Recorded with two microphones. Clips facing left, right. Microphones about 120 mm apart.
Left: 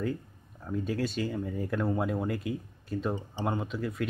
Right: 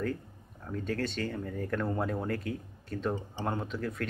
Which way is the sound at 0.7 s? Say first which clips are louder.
Left 2 dB; 10° left (ahead or behind).